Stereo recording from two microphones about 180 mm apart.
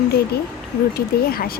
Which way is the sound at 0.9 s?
55° left (ahead or behind).